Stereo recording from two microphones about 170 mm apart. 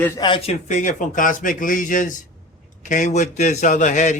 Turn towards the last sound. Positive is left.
turn(degrees=45)  # may be behind; listen again after turning